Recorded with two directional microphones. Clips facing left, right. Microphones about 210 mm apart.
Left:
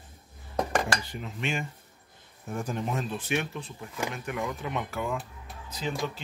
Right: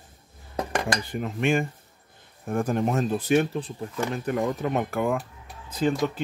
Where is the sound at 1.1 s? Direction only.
55° right (ahead or behind).